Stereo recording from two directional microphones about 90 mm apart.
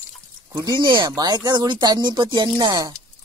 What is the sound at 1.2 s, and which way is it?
Speech, 45° right (ahead or behind).